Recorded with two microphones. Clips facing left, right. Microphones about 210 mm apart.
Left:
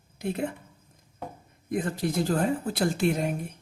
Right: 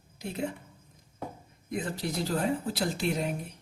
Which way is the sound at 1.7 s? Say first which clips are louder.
Left 5 dB; 50° left (ahead or behind).